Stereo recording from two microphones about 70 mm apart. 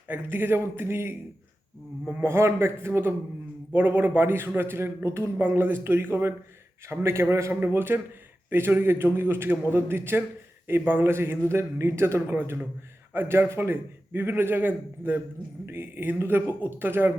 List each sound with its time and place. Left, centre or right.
0.1 s a man's voice: right
2.2 s a man's voice: right